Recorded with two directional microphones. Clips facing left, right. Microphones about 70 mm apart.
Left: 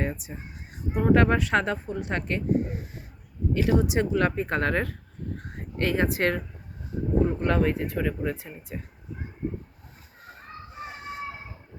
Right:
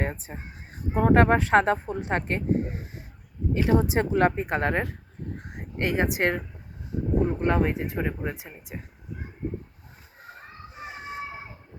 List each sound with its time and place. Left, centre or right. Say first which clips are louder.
0.0 s speech: even; right
4.4 s speech: even; centre
5.4 s a sound: left 1 dB; centre
7.3 s speech: even; centre
10.7 s children playing: even; right